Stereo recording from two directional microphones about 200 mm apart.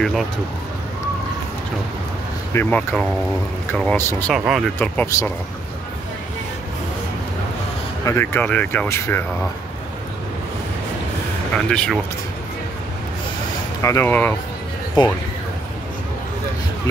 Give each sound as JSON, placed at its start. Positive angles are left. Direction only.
{"t": 2.5, "sound": "speech", "side_deg": 10}
{"t": 4.3, "sound": "speech", "side_deg": 0}
{"t": 4.7, "sound": "speech", "side_deg": 10}
{"t": 8.0, "sound": "speech", "side_deg": 15}
{"t": 11.7, "sound": "speech", "side_deg": 5}
{"t": 13.8, "sound": "speech", "side_deg": 10}
{"t": 15.0, "sound": "speech", "side_deg": 20}